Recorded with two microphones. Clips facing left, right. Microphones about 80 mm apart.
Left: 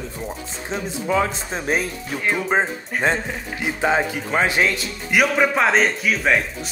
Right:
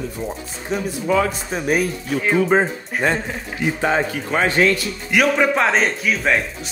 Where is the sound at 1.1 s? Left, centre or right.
Left.